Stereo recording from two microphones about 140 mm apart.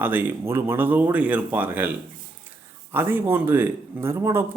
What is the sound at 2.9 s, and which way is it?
Speech, 15° right (ahead or behind).